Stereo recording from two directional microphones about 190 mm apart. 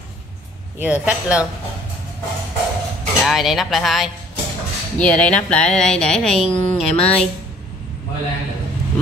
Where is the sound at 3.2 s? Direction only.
Centre (ahead or behind).